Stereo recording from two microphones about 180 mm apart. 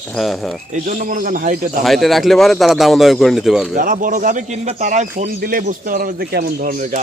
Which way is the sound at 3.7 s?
50° right (ahead or behind).